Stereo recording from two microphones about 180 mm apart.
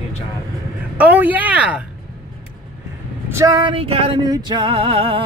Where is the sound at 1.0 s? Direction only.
10° right (ahead or behind).